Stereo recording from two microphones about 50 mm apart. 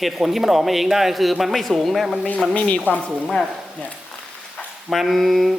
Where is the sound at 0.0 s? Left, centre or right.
Centre.